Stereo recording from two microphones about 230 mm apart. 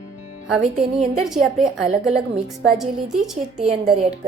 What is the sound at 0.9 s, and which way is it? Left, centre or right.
A woman's voice, centre.